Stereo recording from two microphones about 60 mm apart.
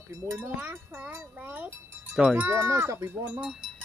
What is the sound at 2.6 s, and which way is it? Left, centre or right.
Speech, right.